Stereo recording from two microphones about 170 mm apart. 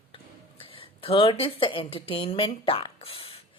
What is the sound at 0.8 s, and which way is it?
A woman's voice, 30° left (ahead or behind).